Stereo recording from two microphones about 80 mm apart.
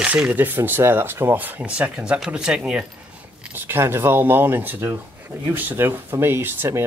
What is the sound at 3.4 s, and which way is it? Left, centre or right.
Speech, right.